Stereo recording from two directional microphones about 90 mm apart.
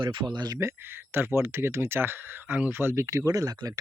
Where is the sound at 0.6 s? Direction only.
30° right (ahead or behind).